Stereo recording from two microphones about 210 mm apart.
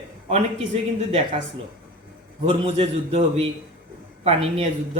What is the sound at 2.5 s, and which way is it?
Speech, 25° right (ahead or behind).